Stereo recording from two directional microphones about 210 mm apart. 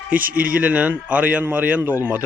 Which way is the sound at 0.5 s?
5° right (ahead or behind).